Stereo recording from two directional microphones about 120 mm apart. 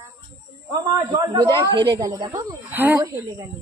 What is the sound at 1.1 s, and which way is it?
A woman's voice, 35° right (ahead or behind).